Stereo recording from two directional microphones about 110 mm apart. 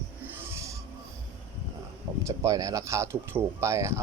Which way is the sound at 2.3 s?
30° right (ahead or behind).